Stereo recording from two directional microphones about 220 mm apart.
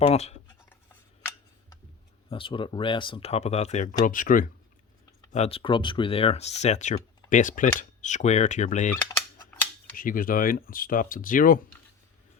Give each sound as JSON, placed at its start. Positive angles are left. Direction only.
{"t": 0.0, "sound": "speech", "side_deg": 30}
{"t": 2.3, "sound": "speech", "side_deg": 25}
{"t": 5.3, "sound": "speech", "side_deg": 25}